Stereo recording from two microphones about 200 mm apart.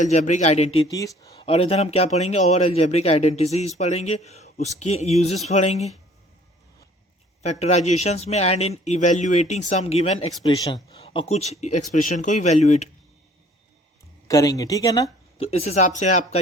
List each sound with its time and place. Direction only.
0.0 s a man's voice: 35° left (ahead or behind)
0.9 s speech: 15° left (ahead or behind)
1.5 s a man's voice: 30° left (ahead or behind)
7.4 s a man's voice: 35° left (ahead or behind)
14.3 s speech: 15° left (ahead or behind)
15.4 s a man's voice: 30° left (ahead or behind)